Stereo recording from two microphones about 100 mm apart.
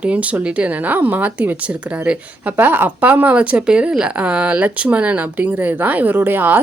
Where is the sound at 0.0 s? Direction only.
15° right (ahead or behind).